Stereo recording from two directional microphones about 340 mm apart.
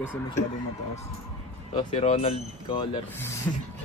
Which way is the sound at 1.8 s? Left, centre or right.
Centre.